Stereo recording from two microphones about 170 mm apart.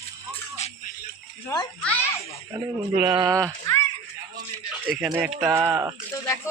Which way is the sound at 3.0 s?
25° right (ahead or behind).